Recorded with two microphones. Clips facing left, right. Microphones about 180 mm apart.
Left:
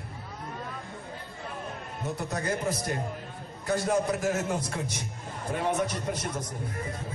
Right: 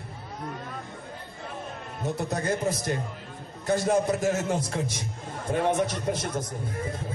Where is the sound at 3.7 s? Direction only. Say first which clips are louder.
Right 3 dB; 25° right (ahead or behind).